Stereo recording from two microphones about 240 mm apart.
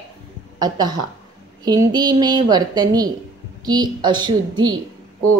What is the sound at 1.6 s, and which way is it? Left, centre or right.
A woman's voice, centre.